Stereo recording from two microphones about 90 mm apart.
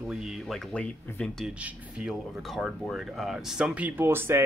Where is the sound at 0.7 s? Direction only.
10° left (ahead or behind).